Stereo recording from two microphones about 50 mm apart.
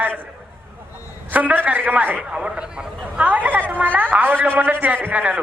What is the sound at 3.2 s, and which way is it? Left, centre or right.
A man's voice, right.